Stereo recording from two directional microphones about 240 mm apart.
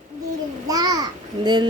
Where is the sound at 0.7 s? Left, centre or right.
Centre.